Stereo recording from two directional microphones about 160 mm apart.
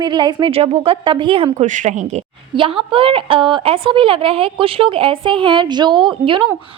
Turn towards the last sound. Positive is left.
turn(degrees=-30)  # may be behind; listen again after turning